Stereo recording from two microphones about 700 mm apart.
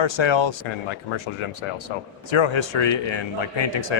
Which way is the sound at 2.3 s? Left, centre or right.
Left.